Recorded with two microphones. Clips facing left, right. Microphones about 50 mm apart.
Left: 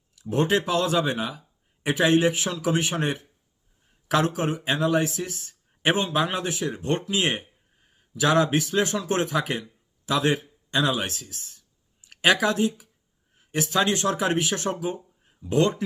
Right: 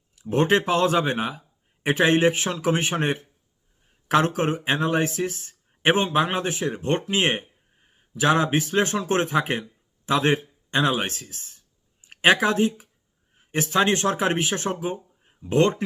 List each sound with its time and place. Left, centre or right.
0.2 s speech: right
4.3 s speech: right
15.5 s speech: right